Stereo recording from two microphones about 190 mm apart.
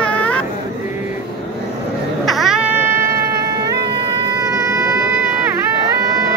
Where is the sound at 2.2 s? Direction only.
Centre (ahead or behind); by 3.8 s 15° right (ahead or behind).